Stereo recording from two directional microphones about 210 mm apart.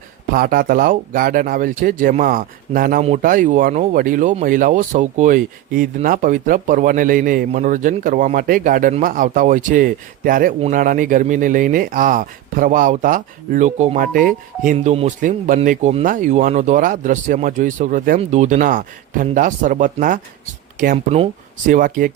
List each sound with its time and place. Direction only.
0.3 s speech: 45° right (ahead or behind)